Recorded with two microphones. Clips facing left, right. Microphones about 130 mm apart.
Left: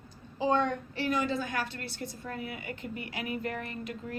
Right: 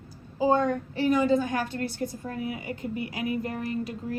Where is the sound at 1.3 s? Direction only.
45° right (ahead or behind).